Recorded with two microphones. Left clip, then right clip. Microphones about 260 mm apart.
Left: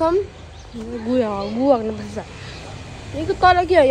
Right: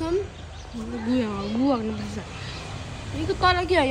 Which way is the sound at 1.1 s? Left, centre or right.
Centre.